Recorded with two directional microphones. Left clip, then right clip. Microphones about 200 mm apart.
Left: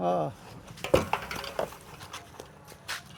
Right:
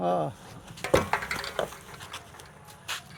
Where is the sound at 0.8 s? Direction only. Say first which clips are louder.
Right 1 dB; 20° right (ahead or behind).